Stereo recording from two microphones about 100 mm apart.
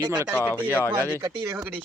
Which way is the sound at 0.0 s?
45° right (ahead or behind).